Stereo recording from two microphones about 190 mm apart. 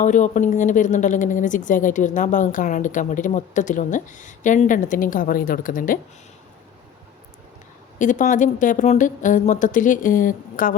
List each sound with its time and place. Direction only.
0.0 s a woman's voice: 40° left (ahead or behind)
7.9 s speech: 40° left (ahead or behind)